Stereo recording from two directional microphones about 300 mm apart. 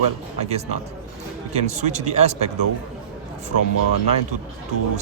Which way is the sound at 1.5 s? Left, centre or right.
Right.